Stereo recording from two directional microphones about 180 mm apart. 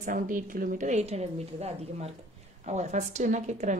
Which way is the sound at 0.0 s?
45° right (ahead or behind).